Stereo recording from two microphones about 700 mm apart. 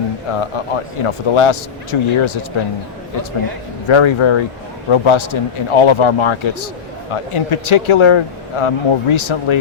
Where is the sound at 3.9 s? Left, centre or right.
Left.